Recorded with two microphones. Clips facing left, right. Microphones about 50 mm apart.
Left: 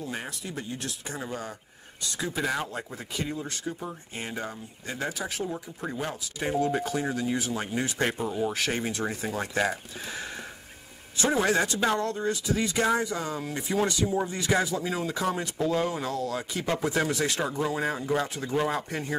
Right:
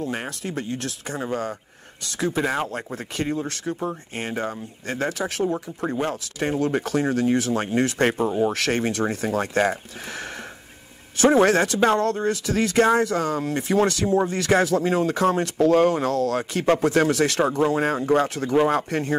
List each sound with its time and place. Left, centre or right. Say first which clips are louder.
0.0 s speech: right 7 dB; right
2.3 s speech: right 4 dB; right
4.2 s speech: right 6 dB; right
5.2 s speech: right 8 dB; right
8.3 s speech: right 7 dB; right
8.5 s speech: right 6 dB; right
11.2 s speech: right 8 dB; right